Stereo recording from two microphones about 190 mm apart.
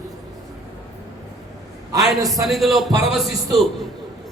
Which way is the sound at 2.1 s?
20° right (ahead or behind).